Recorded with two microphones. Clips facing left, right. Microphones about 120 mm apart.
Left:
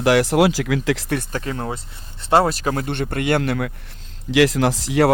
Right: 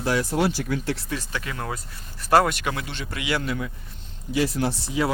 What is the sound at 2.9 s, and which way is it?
Speech, 55° left (ahead or behind).